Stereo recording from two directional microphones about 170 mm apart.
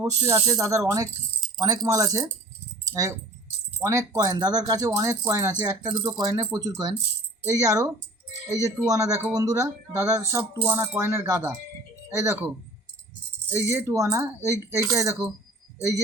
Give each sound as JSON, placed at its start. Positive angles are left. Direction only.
{"t": 0.0, "sound": "speech", "side_deg": -15}
{"t": 13.7, "sound": "speech", "side_deg": -15}